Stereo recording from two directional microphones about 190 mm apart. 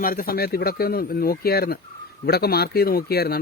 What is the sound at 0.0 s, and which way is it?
Speech, 50° left (ahead or behind).